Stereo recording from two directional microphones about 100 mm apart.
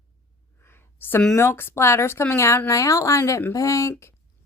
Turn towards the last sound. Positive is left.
turn(degrees=30)  # may be behind; listen again after turning